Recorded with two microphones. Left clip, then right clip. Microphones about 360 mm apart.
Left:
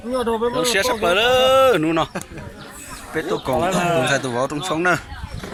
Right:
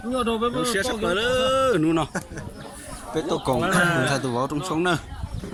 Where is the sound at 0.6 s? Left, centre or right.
Centre.